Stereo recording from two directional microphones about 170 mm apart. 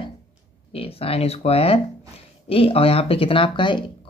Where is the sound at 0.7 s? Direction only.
35° left (ahead or behind).